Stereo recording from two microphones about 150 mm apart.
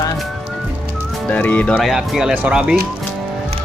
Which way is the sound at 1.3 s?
10° left (ahead or behind).